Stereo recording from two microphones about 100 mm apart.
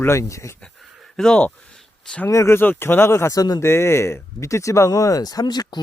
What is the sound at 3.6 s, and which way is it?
Speech, 25° left (ahead or behind).